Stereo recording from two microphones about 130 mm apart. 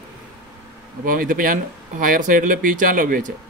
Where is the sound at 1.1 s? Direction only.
90° right.